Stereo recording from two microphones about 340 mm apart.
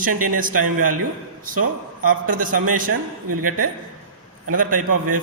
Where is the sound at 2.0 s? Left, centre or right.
Right.